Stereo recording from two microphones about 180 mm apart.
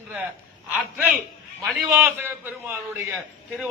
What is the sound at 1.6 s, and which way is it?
Speech, centre (ahead or behind).